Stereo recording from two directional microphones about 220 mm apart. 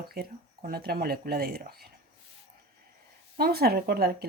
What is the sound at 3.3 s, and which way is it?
Speech, 45° right (ahead or behind).